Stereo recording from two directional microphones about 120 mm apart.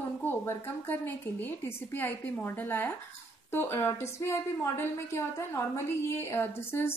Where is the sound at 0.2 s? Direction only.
15° left (ahead or behind).